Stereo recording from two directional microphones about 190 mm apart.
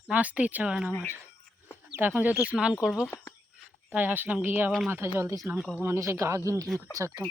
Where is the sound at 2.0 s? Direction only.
10° right (ahead or behind).